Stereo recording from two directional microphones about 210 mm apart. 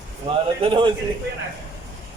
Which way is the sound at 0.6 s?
25° right (ahead or behind).